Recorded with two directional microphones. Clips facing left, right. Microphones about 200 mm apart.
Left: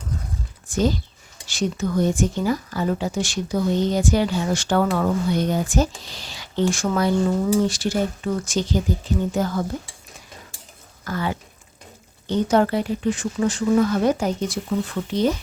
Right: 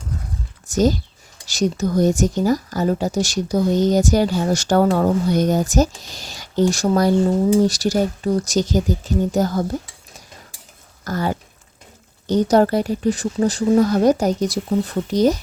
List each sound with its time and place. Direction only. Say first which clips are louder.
0.7 s speech: right 4 dB; 40° right (ahead or behind)
11.0 s speech: right 3 dB; 40° right (ahead or behind)